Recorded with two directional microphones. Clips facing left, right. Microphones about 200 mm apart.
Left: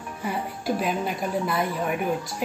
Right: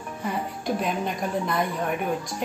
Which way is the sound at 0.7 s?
5° left (ahead or behind).